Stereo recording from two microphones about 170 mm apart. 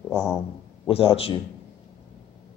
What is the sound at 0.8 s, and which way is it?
Speech, 35° left (ahead or behind).